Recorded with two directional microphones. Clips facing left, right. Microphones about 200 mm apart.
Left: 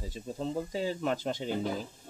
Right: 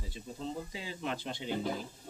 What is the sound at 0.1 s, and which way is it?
Speech, 45° left (ahead or behind).